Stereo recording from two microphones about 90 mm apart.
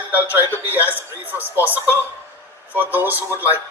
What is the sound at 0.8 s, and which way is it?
Speech, 25° left (ahead or behind).